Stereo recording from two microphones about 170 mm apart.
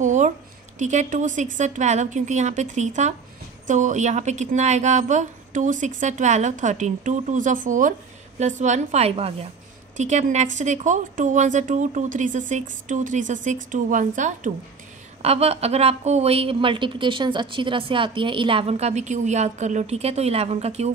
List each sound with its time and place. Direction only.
0.0 s a sound: 45° right (ahead or behind)
0.7 s a woman's voice: 45° right (ahead or behind)
15.2 s a woman's voice: 35° right (ahead or behind)